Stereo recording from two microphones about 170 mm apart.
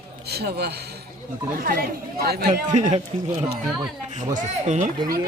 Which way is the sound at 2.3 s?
70° right (ahead or behind).